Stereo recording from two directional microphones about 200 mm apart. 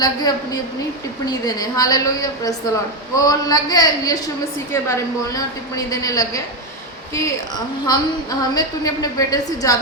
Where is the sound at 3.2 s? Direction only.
20° left (ahead or behind).